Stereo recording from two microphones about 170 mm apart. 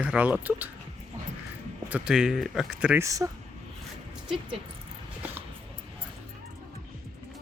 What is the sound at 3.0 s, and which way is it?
Speech, 20° right (ahead or behind).